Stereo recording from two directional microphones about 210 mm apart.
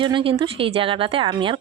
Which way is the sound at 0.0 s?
25° right (ahead or behind).